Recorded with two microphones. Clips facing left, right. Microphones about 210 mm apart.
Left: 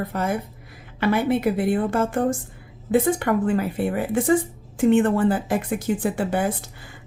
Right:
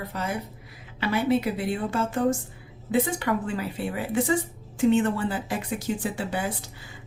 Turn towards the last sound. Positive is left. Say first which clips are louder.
# left 6 dB
turn(degrees=55)  # may be behind; listen again after turning